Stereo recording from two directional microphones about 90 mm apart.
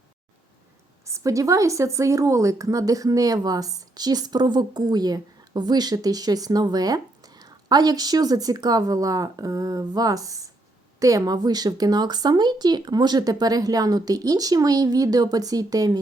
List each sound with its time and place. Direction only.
1.0 s a woman's voice: 35° right (ahead or behind)